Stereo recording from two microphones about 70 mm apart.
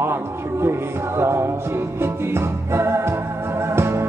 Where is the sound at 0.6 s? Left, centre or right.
Right.